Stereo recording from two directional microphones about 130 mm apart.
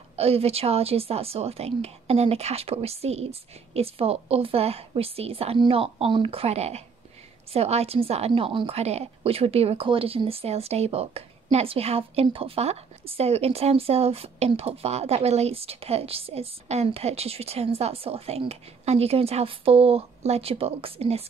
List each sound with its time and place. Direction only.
0.1 s a woman's voice: 50° right (ahead or behind)